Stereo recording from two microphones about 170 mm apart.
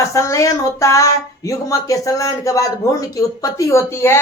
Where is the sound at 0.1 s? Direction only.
15° left (ahead or behind).